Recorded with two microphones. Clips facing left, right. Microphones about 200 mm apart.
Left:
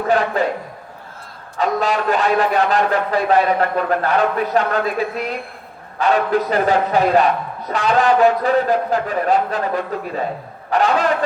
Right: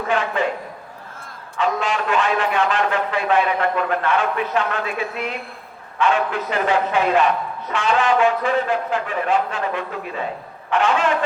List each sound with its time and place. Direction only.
0.1 s a man's voice: 35° left (ahead or behind)
1.5 s a man's voice: 40° left (ahead or behind)